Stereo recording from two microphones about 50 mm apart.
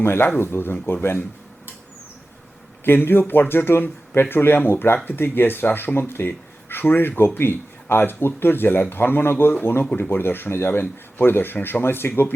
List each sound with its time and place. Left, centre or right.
0.0 s speech: left
2.8 s speech: left